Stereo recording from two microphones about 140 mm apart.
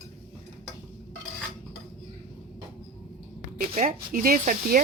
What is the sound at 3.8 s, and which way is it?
Speech, 80° right.